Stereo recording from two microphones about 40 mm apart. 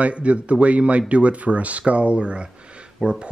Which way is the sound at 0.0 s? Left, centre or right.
Right.